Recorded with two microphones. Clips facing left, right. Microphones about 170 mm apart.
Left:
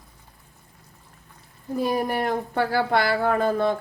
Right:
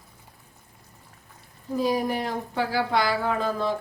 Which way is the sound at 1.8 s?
55° left (ahead or behind).